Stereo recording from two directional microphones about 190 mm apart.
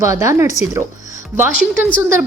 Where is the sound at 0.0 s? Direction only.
15° right (ahead or behind).